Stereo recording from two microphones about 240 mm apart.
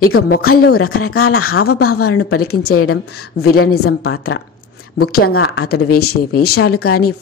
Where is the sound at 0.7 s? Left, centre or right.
Left.